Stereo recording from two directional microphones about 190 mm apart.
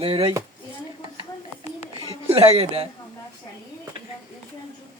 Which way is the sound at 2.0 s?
30° right (ahead or behind).